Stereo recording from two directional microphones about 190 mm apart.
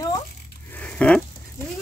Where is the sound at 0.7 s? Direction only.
5° left (ahead or behind).